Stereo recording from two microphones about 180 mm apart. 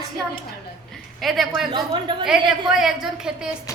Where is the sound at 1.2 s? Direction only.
Centre (ahead or behind).